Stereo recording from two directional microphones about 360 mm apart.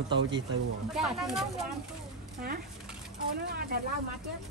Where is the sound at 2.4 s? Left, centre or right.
Right.